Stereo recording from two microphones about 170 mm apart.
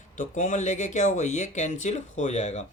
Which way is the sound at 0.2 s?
50° left (ahead or behind).